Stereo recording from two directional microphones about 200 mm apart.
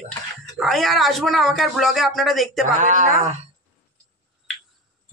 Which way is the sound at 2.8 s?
40° right (ahead or behind).